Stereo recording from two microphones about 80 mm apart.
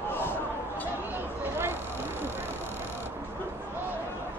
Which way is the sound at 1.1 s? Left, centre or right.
Right.